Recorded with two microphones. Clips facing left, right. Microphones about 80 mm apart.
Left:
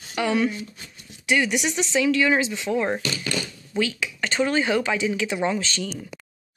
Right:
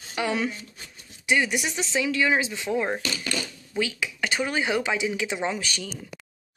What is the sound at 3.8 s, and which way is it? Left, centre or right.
Speech, centre.